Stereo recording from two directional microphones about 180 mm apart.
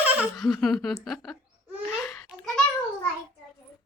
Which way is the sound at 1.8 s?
5° left (ahead or behind).